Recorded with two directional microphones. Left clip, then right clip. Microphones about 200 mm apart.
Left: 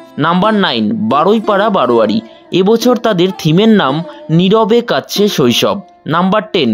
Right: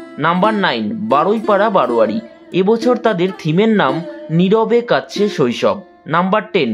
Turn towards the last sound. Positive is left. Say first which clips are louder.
# left 3 dB
turn(degrees=40)  # may be behind; listen again after turning